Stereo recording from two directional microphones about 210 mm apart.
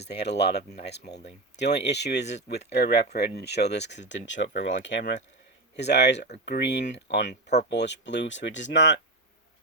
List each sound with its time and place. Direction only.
0.0 s speech: 50° left (ahead or behind)
7.4 s speech: 35° left (ahead or behind)
7.7 s speech: 55° left (ahead or behind)